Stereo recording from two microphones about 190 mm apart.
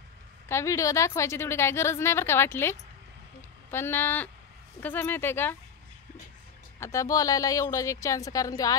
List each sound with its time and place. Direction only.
0.5 s a woman's voice: 15° left (ahead or behind)
6.8 s a woman's voice: 15° left (ahead or behind)